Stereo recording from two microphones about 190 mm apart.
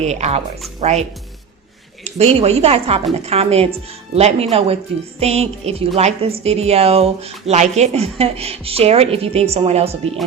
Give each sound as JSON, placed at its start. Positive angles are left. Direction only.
{"t": 0.0, "sound": "speech", "side_deg": -35}
{"t": 2.0, "sound": "speech", "side_deg": -35}